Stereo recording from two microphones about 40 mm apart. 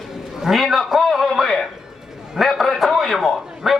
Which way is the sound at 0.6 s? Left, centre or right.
Centre.